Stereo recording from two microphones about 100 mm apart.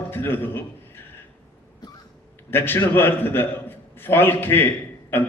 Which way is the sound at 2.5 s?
20° left (ahead or behind).